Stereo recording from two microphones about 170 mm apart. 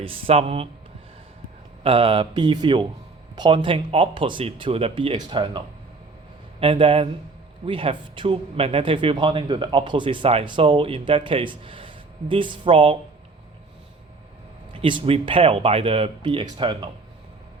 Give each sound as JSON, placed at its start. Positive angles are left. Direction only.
{"t": 0.0, "sound": "speech", "side_deg": -30}
{"t": 1.8, "sound": "speech", "side_deg": -35}
{"t": 14.7, "sound": "speech", "side_deg": -30}